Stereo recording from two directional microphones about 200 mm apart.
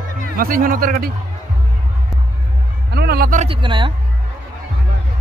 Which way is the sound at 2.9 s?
50° right (ahead or behind).